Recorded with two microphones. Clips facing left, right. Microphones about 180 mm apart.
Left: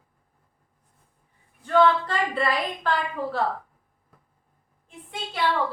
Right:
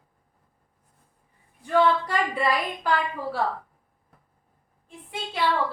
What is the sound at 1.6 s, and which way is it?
A woman's voice, 10° right (ahead or behind).